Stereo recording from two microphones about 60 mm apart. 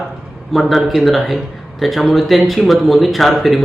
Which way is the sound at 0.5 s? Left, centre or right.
Centre.